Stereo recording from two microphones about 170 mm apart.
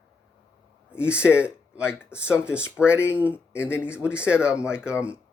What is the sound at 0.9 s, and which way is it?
Speech, 5° right (ahead or behind).